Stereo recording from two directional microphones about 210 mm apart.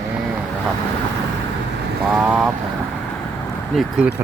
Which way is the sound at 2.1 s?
Centre (ahead or behind).